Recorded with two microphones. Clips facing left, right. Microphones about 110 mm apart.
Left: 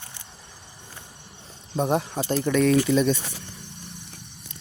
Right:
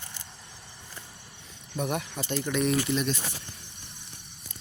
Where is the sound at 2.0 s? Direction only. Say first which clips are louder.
Left 7 dB; 45° left (ahead or behind).